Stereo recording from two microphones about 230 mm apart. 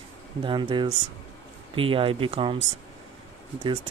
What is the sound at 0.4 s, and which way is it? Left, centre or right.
Speech, right.